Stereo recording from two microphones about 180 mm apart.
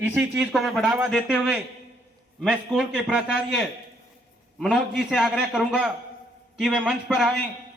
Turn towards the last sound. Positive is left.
turn(degrees=0)  # may be behind; listen again after turning